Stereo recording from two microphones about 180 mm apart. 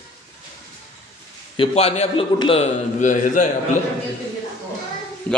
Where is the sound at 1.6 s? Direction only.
35° left (ahead or behind).